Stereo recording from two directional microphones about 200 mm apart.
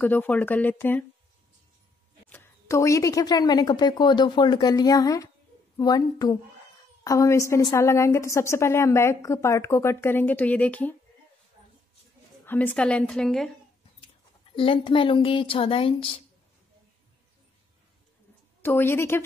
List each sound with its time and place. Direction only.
0.0 s a woman's voice: 10° left (ahead or behind)
2.2 s a woman's voice: 10° left (ahead or behind)
12.4 s a woman's voice: 10° left (ahead or behind)
14.0 s a woman's voice: 25° left (ahead or behind)
18.6 s a woman's voice: 10° left (ahead or behind)